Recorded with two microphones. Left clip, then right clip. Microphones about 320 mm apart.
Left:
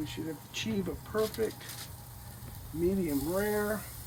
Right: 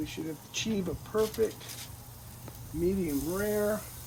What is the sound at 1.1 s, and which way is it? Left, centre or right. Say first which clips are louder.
Speech: right 2 dB; centre.